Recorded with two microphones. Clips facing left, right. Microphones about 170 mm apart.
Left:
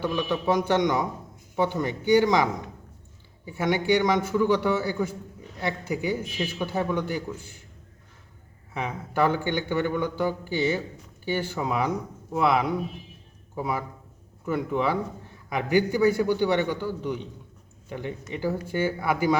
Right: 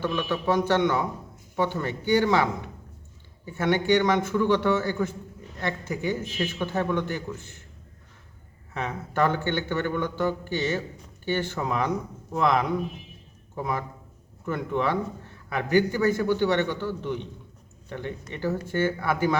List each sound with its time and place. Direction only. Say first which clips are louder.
0.0 s a man's voice: left 1 dB; 15° left (ahead or behind)
8.7 s a man's voice: even; 10° left (ahead or behind)